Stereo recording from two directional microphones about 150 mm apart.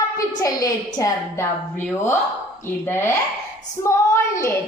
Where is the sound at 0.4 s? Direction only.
25° left (ahead or behind).